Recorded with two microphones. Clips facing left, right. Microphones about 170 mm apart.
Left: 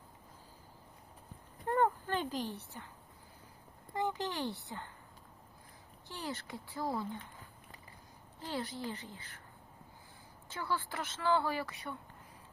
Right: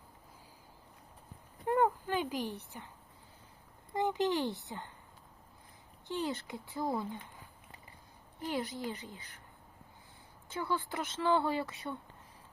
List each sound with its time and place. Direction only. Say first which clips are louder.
1.6 s speech: right 2 dB; 10° right (ahead or behind)
3.9 s a woman's voice: right 5 dB; 20° right (ahead or behind)
6.1 s a woman's voice: right 6 dB; 20° right (ahead or behind)
8.4 s a woman's voice: right 3 dB; 15° right (ahead or behind)
10.5 s a woman's voice: right 2 dB; 20° right (ahead or behind)